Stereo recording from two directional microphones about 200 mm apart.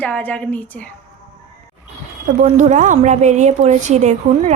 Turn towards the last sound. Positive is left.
turn(degrees=-35)  # may be behind; listen again after turning